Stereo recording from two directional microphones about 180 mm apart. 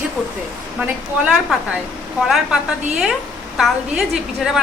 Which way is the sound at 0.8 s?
5° right (ahead or behind).